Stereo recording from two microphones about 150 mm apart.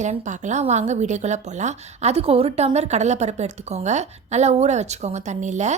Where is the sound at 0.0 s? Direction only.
50° right (ahead or behind).